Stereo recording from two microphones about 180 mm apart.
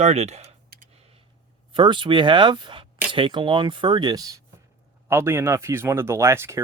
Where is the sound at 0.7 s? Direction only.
55° right (ahead or behind).